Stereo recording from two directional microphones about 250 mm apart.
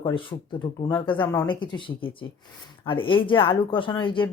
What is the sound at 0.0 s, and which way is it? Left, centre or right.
Speech, centre.